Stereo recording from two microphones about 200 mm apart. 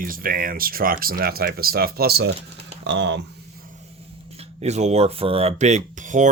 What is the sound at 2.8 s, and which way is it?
Speech, 65° right (ahead or behind).